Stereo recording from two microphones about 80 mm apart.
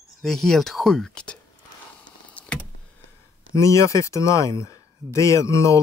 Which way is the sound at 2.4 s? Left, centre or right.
Centre.